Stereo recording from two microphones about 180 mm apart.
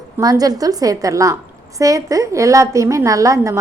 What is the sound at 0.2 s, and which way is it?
A woman's voice, 20° right (ahead or behind).